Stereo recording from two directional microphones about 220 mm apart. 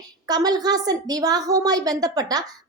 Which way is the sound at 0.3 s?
20° right (ahead or behind).